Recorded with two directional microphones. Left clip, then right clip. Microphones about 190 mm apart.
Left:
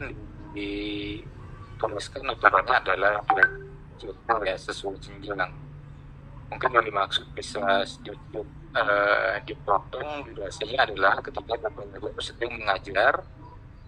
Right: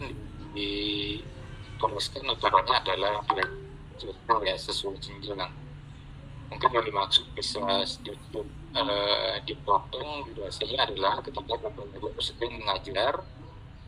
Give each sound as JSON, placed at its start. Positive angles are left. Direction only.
{"t": 0.0, "sound": "music", "side_deg": -25}
{"t": 1.8, "sound": "speech", "side_deg": -20}
{"t": 6.5, "sound": "speech", "side_deg": -25}
{"t": 9.5, "sound": "a man's voice", "side_deg": 5}
{"t": 10.0, "sound": "speech", "side_deg": -25}